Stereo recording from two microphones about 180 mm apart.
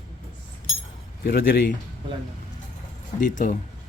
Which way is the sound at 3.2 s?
45° left (ahead or behind).